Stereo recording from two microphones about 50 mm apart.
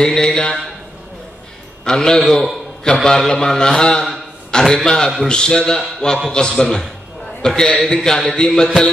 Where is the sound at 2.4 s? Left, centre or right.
Centre.